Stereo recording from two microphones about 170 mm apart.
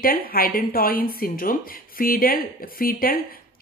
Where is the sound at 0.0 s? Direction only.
60° left (ahead or behind).